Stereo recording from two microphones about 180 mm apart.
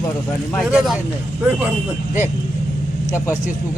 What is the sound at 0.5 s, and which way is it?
Speech, centre (ahead or behind).